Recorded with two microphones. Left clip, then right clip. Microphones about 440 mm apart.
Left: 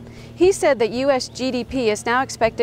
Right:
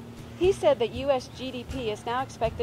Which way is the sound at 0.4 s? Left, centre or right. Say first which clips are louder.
Left 6 dB; left.